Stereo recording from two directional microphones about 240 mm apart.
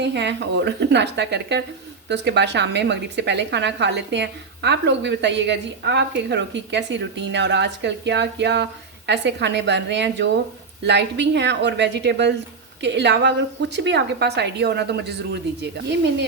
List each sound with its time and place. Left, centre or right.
0.0 s a woman's voice: right